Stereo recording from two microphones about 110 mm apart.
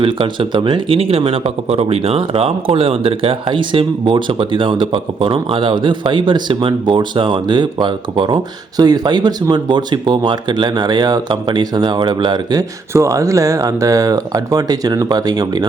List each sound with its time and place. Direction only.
0.0 s speech: 55° right (ahead or behind)
12.9 s speech: 25° right (ahead or behind)